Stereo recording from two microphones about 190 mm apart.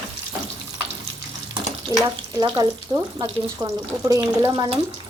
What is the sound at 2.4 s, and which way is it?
Speech, 25° right (ahead or behind).